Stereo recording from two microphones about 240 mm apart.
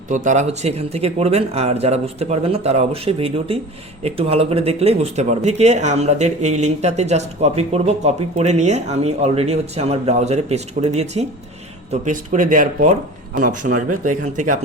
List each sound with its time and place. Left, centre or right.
0.1 s speech: right
13.3 s speech: right
13.7 s speech: right